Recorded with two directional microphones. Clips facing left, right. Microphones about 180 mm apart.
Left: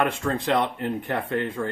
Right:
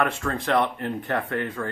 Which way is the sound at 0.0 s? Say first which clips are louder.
Left 1 dB; 20° left (ahead or behind).